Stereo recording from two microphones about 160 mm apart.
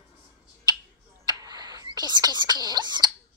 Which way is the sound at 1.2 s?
25° right (ahead or behind).